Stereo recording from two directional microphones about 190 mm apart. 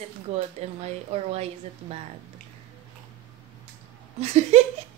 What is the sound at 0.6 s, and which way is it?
Speech, 35° right (ahead or behind).